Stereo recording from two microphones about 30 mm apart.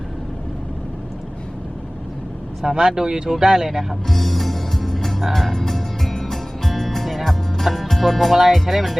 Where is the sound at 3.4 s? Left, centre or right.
Centre.